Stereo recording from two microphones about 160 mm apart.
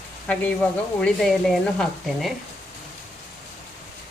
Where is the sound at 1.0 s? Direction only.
5° left (ahead or behind).